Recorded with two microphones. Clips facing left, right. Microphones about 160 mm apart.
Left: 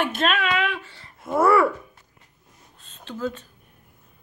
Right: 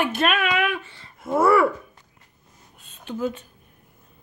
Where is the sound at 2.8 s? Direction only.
15° right (ahead or behind).